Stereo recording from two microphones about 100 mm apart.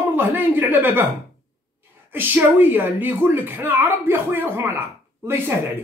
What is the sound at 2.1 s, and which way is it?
Speech, 20° right (ahead or behind).